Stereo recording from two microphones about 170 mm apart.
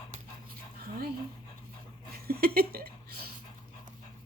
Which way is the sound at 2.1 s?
65° right (ahead or behind).